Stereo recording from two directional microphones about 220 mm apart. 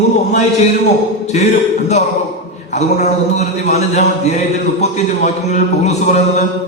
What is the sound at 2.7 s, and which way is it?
A man's voice, 30° left (ahead or behind).